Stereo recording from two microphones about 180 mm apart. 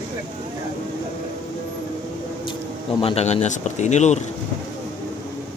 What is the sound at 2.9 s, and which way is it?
Speech, 35° left (ahead or behind).